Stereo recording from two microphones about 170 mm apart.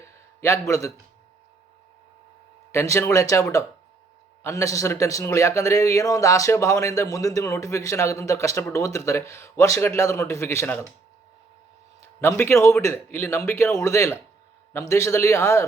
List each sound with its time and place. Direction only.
0.0 s a sound: 15° left (ahead or behind)
2.7 s a man's voice: 15° left (ahead or behind)
12.2 s a man's voice: 15° left (ahead or behind)